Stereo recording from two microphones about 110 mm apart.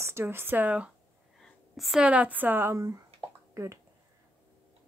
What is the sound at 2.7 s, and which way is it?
Speech, 30° right (ahead or behind).